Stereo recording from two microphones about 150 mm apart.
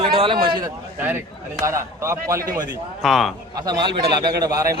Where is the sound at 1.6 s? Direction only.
20° right (ahead or behind).